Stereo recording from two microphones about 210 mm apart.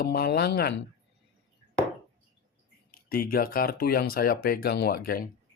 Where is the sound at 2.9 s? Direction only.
45° left (ahead or behind).